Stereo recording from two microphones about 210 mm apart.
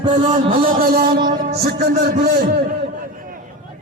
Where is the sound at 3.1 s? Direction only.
40° right (ahead or behind).